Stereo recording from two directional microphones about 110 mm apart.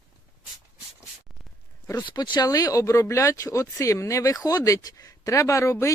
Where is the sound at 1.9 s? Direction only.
40° left (ahead or behind).